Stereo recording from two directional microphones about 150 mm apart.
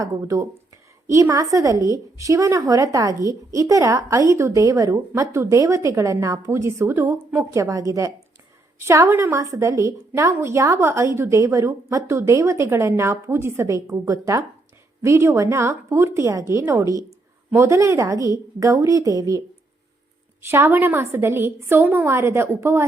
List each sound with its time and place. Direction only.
0.0 s a woman's voice: 20° right (ahead or behind)
20.5 s a woman's voice: 15° right (ahead or behind)